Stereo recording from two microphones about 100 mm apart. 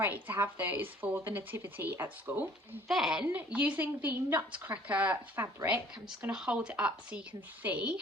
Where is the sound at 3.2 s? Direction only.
15° right (ahead or behind).